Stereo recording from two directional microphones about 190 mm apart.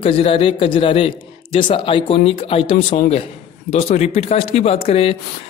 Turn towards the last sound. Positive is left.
turn(degrees=30)  # may be behind; listen again after turning